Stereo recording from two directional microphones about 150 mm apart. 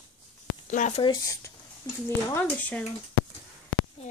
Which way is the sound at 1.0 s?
30° left (ahead or behind).